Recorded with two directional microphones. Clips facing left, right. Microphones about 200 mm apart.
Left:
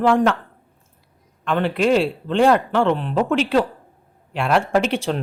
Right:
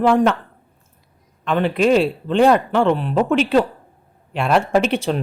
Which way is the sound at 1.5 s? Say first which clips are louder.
Right 2 dB; 15° right (ahead or behind).